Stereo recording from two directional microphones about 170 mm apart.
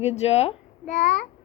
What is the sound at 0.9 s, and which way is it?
Babbling, 50° left (ahead or behind).